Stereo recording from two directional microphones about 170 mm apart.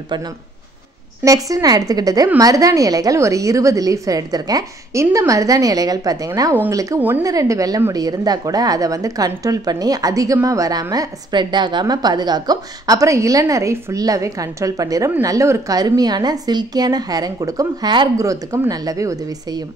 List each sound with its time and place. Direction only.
1.2 s a woman's voice: 20° right (ahead or behind)